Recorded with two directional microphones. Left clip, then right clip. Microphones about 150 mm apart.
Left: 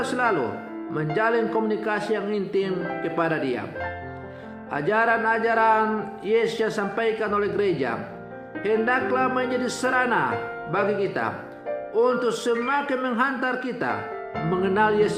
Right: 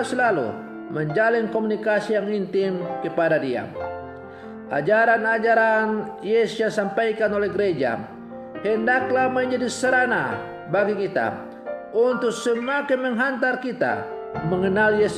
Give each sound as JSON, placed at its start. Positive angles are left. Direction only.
{"t": 0.0, "sound": "a man's voice", "side_deg": -50}
{"t": 4.7, "sound": "a man's voice", "side_deg": -50}